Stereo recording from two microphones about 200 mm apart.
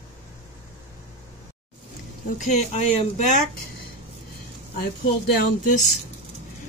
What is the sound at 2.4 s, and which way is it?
A woman's voice, 35° left (ahead or behind).